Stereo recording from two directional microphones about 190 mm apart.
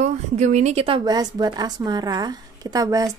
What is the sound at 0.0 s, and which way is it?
A woman's voice, 35° right (ahead or behind).